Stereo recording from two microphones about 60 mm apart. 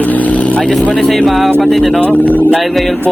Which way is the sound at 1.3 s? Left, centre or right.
Centre.